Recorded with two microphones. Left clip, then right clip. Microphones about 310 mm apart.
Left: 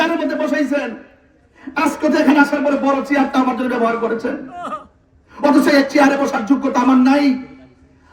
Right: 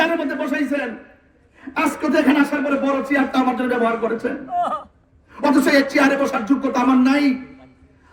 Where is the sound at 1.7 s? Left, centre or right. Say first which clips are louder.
Left 2 dB; centre.